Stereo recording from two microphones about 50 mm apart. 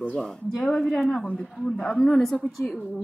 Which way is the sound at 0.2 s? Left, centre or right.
Centre.